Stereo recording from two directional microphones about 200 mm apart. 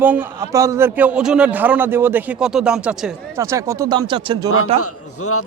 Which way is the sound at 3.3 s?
15° right (ahead or behind).